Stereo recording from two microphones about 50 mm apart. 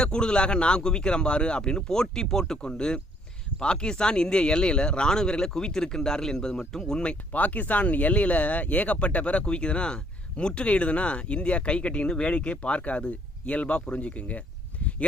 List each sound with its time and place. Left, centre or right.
0.0 s speech: centre
7.4 s speech: left